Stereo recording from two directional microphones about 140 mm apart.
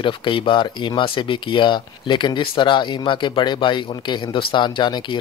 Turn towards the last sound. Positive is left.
turn(degrees=35)  # may be behind; listen again after turning